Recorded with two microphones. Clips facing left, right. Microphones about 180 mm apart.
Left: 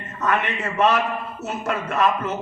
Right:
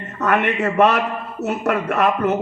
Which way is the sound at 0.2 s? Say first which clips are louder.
Right 5 dB; 60° right (ahead or behind).